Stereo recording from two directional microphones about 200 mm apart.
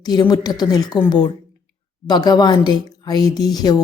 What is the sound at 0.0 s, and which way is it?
A woman's voice, 20° left (ahead or behind).